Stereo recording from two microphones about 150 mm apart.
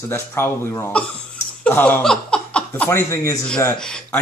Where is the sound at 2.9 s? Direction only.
20° left (ahead or behind).